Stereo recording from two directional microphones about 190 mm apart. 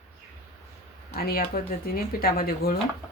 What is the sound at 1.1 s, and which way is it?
Speech, 50° left (ahead or behind).